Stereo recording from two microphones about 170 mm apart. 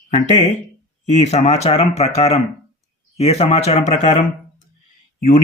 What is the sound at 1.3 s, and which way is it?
Speech, 40° left (ahead or behind).